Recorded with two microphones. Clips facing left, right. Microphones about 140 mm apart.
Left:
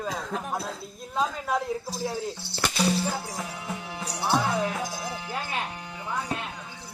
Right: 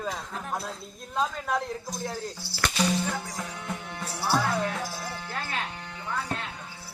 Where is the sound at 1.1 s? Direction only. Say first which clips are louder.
Left 1 dB; 5° left (ahead or behind).